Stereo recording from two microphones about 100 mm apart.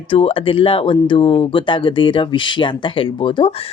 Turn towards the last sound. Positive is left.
turn(degrees=65)  # may be behind; listen again after turning